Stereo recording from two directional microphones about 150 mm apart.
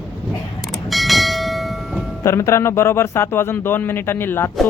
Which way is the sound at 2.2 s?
20° left (ahead or behind).